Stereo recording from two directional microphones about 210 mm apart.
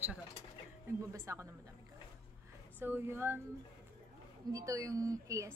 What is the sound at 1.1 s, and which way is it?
Speech, 15° right (ahead or behind).